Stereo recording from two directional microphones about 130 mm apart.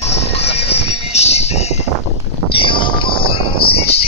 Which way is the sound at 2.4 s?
40° left (ahead or behind).